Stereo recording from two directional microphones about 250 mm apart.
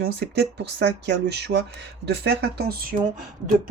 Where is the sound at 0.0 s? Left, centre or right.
Right.